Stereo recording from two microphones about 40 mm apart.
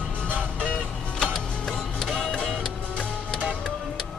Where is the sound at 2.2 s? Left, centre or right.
Centre.